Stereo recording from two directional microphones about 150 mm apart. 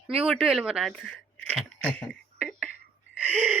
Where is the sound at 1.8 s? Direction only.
5° left (ahead or behind).